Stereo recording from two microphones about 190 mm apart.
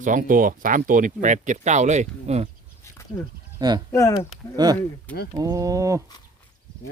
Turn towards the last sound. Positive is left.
turn(degrees=-15)  # may be behind; listen again after turning